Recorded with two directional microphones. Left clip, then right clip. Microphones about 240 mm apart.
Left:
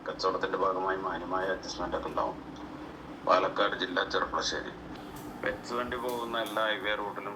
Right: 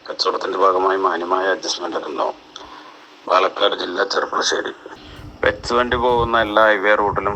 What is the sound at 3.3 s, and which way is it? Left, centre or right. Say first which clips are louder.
Speech: right 11 dB; right.